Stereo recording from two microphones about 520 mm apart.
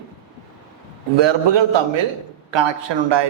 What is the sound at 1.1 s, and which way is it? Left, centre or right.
A man's voice, right.